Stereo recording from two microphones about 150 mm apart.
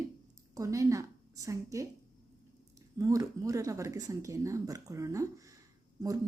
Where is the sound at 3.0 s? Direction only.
20° right (ahead or behind).